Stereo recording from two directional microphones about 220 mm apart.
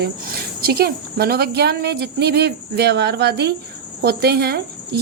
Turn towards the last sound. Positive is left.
turn(degrees=-45)  # may be behind; listen again after turning